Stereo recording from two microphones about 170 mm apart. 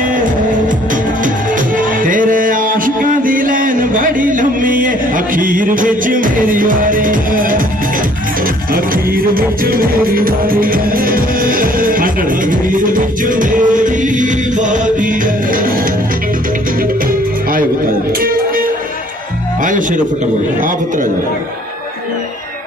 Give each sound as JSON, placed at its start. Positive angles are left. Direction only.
{"t": 0.0, "sound": "music", "side_deg": -55}
{"t": 8.7, "sound": "music", "side_deg": -60}
{"t": 18.2, "sound": "music", "side_deg": -60}
{"t": 19.6, "sound": "speech", "side_deg": -50}